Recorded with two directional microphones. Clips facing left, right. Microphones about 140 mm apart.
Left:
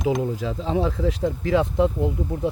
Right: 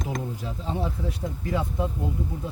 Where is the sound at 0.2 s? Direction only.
90° left.